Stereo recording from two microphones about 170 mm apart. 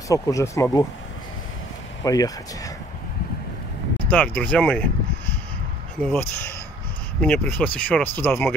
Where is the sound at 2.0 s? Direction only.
20° left (ahead or behind).